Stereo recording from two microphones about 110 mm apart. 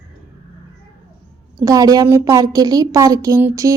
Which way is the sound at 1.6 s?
30° right (ahead or behind).